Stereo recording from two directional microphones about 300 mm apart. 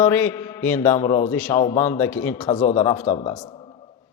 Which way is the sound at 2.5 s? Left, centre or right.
Centre.